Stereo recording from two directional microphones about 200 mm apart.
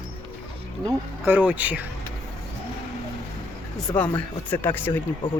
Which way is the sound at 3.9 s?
10° left (ahead or behind).